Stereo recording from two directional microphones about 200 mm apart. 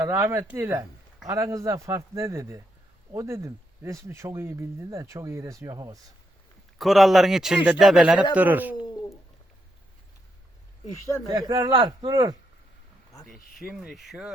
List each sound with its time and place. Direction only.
0.0 s speech: 15° right (ahead or behind)
6.7 s speech: centre (ahead or behind)
11.3 s a man's voice: 20° right (ahead or behind)
13.6 s speech: centre (ahead or behind)